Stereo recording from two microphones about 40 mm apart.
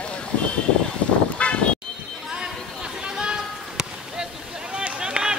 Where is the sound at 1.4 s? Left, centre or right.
Left.